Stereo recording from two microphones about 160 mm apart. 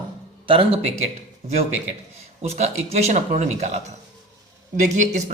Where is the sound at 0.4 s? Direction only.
35° right (ahead or behind).